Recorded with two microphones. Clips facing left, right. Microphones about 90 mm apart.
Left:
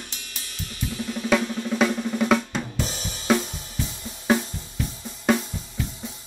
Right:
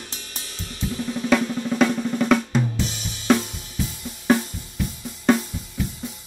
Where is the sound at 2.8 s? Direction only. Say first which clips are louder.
Right 1 dB; 40° left (ahead or behind).